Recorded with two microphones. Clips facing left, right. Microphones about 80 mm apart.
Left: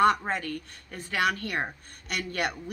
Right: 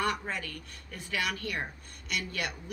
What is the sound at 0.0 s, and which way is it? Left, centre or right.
Speech, left.